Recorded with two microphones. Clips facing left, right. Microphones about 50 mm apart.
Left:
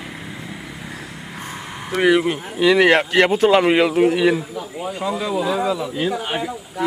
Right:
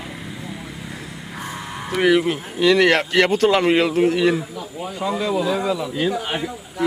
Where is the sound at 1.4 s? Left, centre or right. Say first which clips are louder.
Right 2 dB; centre.